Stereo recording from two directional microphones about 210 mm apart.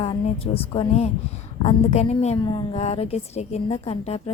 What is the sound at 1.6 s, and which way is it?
A woman's voice, 30° left (ahead or behind).